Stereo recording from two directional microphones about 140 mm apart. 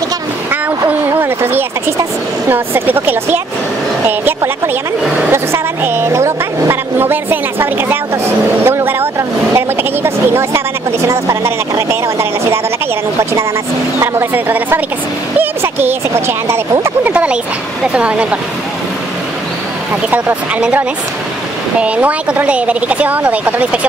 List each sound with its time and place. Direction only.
0.5 s a sound: 15° right (ahead or behind)
2.5 s speech: 15° right (ahead or behind)
5.3 s speech: 20° right (ahead or behind)
20.1 s speech: 10° right (ahead or behind)